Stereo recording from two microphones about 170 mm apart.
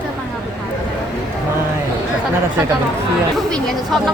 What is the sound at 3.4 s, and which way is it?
Speech, 5° left (ahead or behind).